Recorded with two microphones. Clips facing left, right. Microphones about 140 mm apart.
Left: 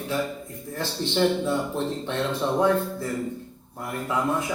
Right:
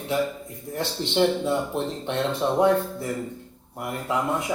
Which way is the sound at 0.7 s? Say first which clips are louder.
Right 1 dB; 20° right (ahead or behind).